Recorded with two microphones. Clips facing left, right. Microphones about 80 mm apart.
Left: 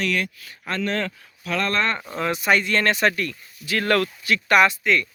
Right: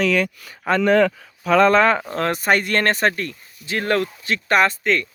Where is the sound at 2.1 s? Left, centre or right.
Right.